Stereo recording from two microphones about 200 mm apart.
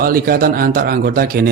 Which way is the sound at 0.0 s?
45° right (ahead or behind).